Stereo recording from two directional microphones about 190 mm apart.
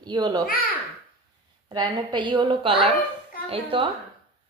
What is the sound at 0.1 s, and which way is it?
Speech, 20° right (ahead or behind).